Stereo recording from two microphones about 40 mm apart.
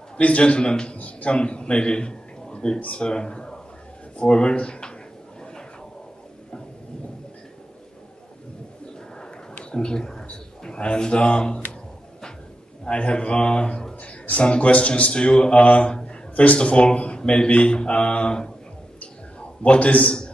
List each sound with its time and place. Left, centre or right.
0.2 s speech: left
0.9 s a man's voice: left
9.6 s a sound: left
10.6 s speech: left
12.8 s a man's voice: left
19.6 s a man's voice: left